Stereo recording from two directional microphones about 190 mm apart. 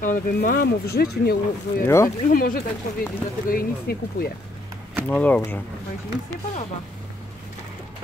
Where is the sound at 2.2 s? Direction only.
45° left (ahead or behind).